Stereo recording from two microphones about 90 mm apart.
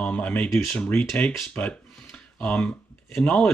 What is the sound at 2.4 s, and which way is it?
Speech, 15° left (ahead or behind).